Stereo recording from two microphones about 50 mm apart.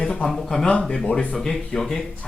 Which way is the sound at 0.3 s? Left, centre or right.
Centre.